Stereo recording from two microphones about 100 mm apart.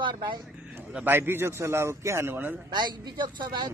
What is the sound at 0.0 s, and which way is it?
Speech, 50° right (ahead or behind).